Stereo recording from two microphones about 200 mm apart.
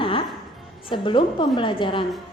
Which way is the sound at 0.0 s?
25° left (ahead or behind).